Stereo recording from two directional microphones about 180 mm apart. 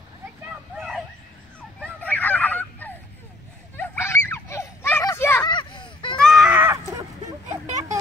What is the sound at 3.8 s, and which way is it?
Children playing, 15° left (ahead or behind).